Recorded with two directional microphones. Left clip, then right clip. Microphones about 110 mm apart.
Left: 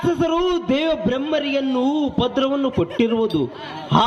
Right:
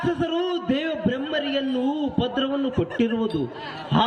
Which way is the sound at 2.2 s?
20° left (ahead or behind).